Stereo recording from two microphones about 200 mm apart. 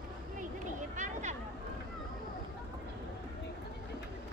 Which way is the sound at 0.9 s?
35° right (ahead or behind).